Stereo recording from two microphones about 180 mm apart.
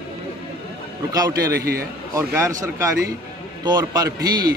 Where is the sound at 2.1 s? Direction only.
20° right (ahead or behind).